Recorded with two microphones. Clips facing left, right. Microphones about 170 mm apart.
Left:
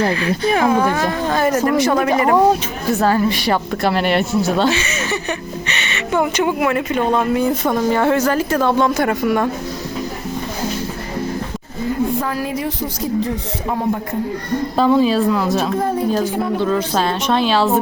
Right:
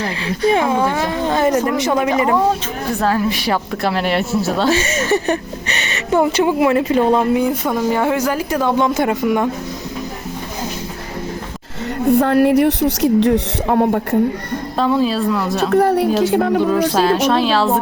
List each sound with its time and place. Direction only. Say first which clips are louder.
0.5 s speech: left 2 dB; 25° right (ahead or behind)
3.0 s a woman's voice: left 1 dB; centre (ahead or behind)
4.7 s speech: right 5 dB; 45° right (ahead or behind)
7.3 s a woman's voice: even; 10° right (ahead or behind)
11.8 s a woman's voice: right 4 dB; 75° right (ahead or behind)
14.8 s a woman's voice: left 2 dB; centre (ahead or behind)
15.7 s a woman's voice: right 4 dB; 75° right (ahead or behind)
16.6 s a woman's voice: right 3 dB; 5° right (ahead or behind)